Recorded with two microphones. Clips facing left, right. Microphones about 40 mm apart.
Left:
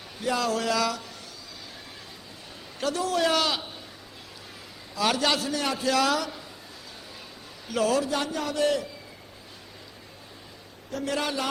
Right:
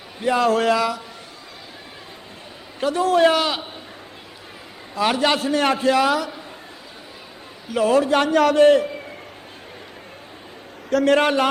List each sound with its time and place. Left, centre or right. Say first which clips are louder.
0.2 s a man's voice: right 8 dB; right
0.8 s a man's voice: right 5 dB; centre
3.0 s a man's voice: right 10 dB; right
3.3 s a man's voice: right 4 dB; right
4.9 s a man's voice: right 5 dB; right
5.9 s a man's voice: right 6 dB; right
7.9 s a man's voice: right 11 dB; right
8.6 s a man's voice: right 9 dB; right
10.8 s a man's voice: right 12 dB; right